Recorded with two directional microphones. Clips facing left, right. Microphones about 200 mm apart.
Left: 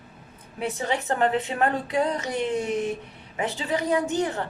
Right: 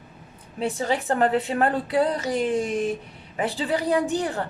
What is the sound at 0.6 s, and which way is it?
A woman's voice, 35° right (ahead or behind).